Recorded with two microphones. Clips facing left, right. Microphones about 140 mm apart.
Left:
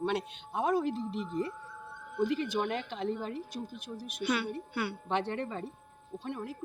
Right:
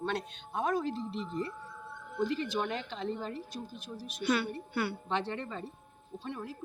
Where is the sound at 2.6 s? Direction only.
10° left (ahead or behind).